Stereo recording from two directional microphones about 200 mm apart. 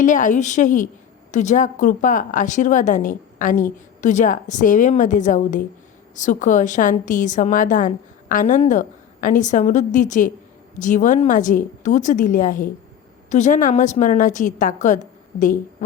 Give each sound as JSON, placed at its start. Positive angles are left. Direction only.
{"t": 0.0, "sound": "a woman's voice", "side_deg": 40}